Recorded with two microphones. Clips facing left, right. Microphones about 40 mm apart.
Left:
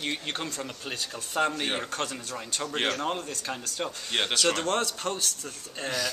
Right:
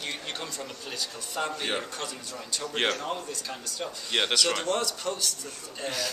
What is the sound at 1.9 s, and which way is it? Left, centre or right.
A man's voice, left.